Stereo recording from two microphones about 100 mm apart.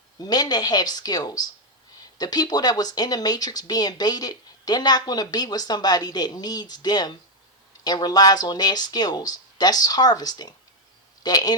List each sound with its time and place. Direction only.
0.2 s speech: 40° left (ahead or behind)